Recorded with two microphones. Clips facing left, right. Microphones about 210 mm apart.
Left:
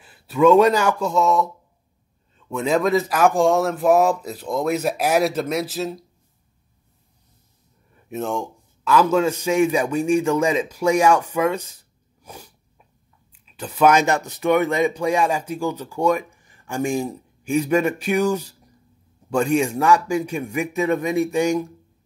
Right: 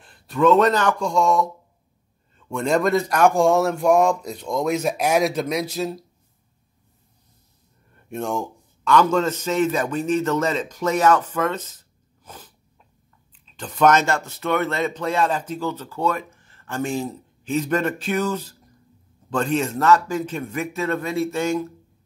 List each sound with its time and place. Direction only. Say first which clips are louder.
0.0 s a man's voice: left 3 dB; 5° left (ahead or behind)
7.9 s a man's voice: left 1 dB; centre (ahead or behind)